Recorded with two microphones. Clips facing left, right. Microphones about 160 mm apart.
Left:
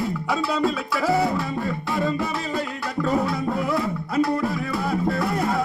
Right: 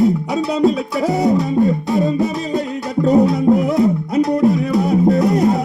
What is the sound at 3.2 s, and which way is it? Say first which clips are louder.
Music: right 10 dB; 20° right (ahead or behind).